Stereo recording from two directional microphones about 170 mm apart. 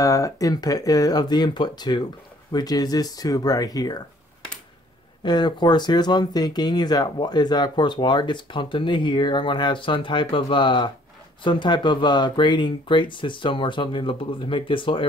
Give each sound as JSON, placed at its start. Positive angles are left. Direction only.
{"t": 0.0, "sound": "speech", "side_deg": 20}
{"t": 5.2, "sound": "speech", "side_deg": 25}